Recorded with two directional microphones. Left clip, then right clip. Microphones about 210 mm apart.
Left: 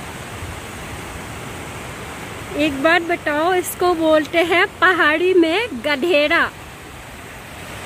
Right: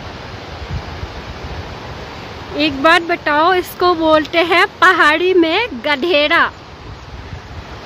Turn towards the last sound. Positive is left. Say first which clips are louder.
# right 3 dB
turn(degrees=0)  # may be behind; listen again after turning